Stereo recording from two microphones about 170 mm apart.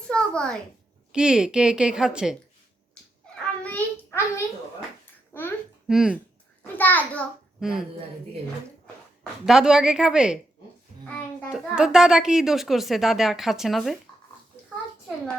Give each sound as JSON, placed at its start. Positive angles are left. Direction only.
{"t": 0.1, "sound": "a sound", "side_deg": 5}
{"t": 1.1, "sound": "speech", "side_deg": -5}
{"t": 3.6, "sound": "a sound", "side_deg": 10}
{"t": 5.3, "sound": "babbling", "side_deg": 10}
{"t": 5.9, "sound": "speech", "side_deg": -5}
{"t": 6.7, "sound": "a child's voice", "side_deg": 10}
{"t": 7.6, "sound": "speech", "side_deg": -5}
{"t": 9.5, "sound": "speech", "side_deg": -5}
{"t": 11.4, "sound": "speech", "side_deg": -5}